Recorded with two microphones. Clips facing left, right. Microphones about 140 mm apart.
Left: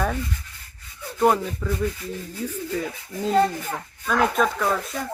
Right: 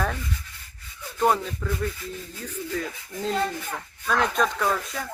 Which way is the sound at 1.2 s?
5° left (ahead or behind).